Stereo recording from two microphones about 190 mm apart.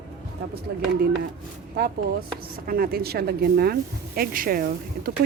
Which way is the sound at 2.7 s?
50° right (ahead or behind).